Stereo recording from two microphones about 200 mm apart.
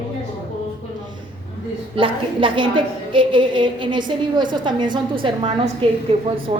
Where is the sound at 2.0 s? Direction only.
25° right (ahead or behind).